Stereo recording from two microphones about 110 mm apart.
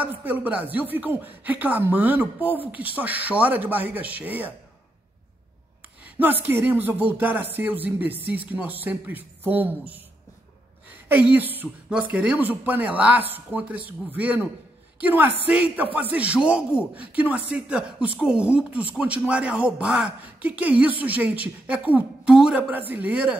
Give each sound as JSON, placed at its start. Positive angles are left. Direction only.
{"t": 0.0, "sound": "a man's voice", "side_deg": -15}
{"t": 6.0, "sound": "a man's voice", "side_deg": -15}
{"t": 11.1, "sound": "a man's voice", "side_deg": -15}